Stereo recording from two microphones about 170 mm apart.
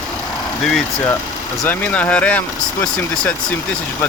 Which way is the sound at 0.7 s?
5° left (ahead or behind).